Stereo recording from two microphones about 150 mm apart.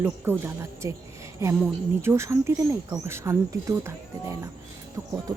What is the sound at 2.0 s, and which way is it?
Speech, 20° right (ahead or behind).